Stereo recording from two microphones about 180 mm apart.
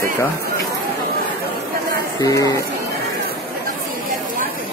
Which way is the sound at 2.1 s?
20° left (ahead or behind).